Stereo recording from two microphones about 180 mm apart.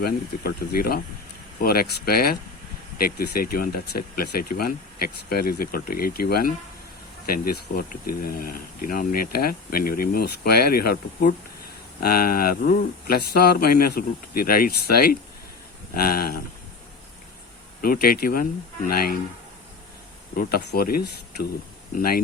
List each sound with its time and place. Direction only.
0.0 s speech: 60° left (ahead or behind)
17.7 s speech: 50° left (ahead or behind)
20.3 s speech: 55° left (ahead or behind)